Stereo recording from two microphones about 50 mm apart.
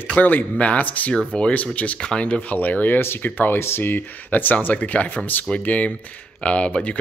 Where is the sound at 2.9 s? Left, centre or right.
Left.